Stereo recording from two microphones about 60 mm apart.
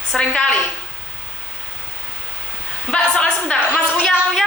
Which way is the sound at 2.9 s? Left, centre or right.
Centre.